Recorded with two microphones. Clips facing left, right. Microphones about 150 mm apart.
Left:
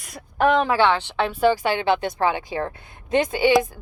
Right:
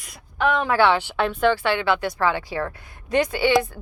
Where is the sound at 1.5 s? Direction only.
15° left (ahead or behind).